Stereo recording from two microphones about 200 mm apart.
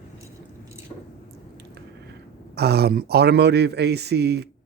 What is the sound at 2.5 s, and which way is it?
A man's voice, 55° right (ahead or behind).